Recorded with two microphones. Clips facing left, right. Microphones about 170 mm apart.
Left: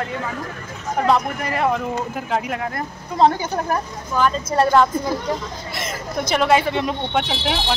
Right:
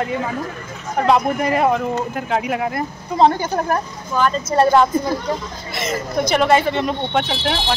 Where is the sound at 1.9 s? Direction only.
Centre (ahead or behind).